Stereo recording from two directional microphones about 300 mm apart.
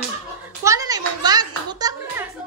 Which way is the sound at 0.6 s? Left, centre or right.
Centre.